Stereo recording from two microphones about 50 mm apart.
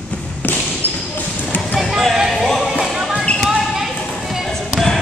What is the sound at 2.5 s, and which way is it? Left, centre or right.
Music, centre.